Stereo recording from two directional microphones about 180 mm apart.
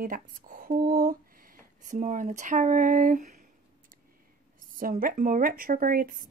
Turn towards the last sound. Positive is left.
turn(degrees=-50)  # may be behind; listen again after turning